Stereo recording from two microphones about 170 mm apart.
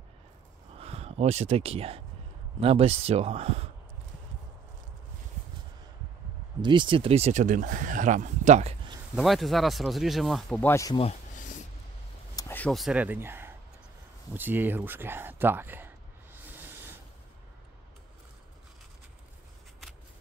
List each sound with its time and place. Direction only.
0.7 s speech: 35° right (ahead or behind)
6.6 s speech: 25° right (ahead or behind); by 8.7 s 45° right (ahead or behind)
9.1 s speech: centre (ahead or behind)
10.7 s speech: 20° left (ahead or behind)
11.0 s a sound: 45° left (ahead or behind)
12.4 s a sound: 10° left (ahead or behind)
12.7 s speech: 5° right (ahead or behind)